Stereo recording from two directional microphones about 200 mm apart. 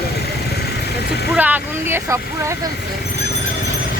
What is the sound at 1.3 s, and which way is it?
Speech, 10° right (ahead or behind).